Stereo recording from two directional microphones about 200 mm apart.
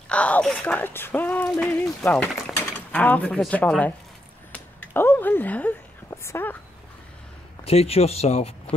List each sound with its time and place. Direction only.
0.1 s speech: 5° left (ahead or behind)
4.5 s a sound: 10° left (ahead or behind)
7.6 s speech: 30° left (ahead or behind)